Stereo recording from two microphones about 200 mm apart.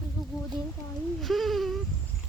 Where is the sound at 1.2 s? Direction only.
Centre (ahead or behind).